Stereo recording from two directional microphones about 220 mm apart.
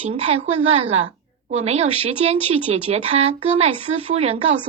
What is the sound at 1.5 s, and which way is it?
A woman's voice, 30° right (ahead or behind).